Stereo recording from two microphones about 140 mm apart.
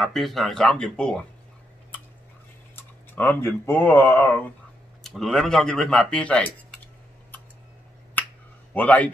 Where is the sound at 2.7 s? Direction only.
15° left (ahead or behind).